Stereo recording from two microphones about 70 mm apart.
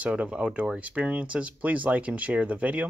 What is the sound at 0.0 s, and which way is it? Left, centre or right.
Speech, centre.